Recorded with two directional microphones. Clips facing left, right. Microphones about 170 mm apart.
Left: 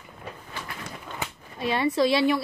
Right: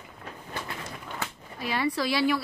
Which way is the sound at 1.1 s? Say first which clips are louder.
Left 3 dB; 25° left (ahead or behind).